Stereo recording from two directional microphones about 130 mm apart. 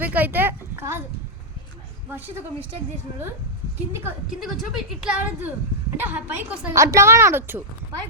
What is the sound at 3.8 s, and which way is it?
Speech, 20° right (ahead or behind).